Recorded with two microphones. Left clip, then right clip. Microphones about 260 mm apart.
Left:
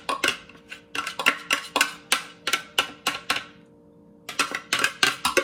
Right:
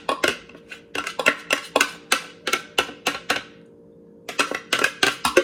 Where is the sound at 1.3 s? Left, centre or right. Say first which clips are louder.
Right 2 dB; centre.